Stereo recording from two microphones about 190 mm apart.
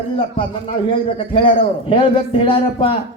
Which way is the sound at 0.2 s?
30° left (ahead or behind).